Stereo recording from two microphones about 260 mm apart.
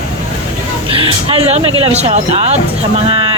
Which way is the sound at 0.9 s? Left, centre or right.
Right.